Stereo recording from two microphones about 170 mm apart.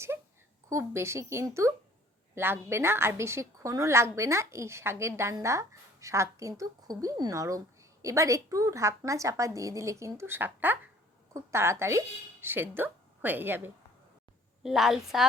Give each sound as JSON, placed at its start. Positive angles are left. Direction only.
{"t": 0.7, "sound": "a woman's voice", "side_deg": -15}
{"t": 14.6, "sound": "a woman's voice", "side_deg": 0}